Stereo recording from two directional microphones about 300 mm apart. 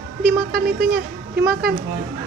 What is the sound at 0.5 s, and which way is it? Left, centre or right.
Speech, right.